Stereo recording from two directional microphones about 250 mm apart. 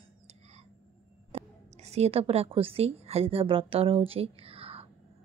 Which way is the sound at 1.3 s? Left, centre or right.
Right.